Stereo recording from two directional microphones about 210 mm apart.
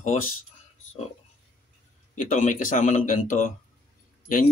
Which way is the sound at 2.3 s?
35° left (ahead or behind).